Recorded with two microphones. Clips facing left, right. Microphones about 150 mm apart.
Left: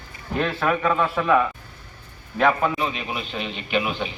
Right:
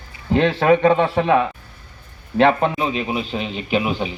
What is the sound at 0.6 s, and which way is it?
Speech, 80° right.